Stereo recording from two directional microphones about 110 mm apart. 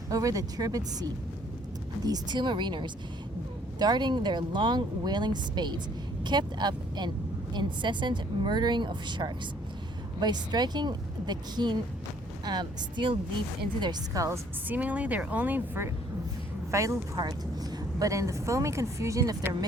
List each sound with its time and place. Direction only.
0.1 s speech: 30° right (ahead or behind)
2.0 s speech: 40° right (ahead or behind)
14.1 s speech: 30° right (ahead or behind)
14.7 s speech: 10° right (ahead or behind)
16.7 s a woman's voice: 30° right (ahead or behind)